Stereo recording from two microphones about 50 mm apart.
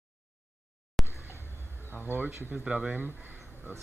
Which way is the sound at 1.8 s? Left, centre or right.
Right.